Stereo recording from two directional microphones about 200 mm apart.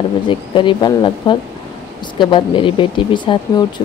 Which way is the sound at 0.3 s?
25° left (ahead or behind).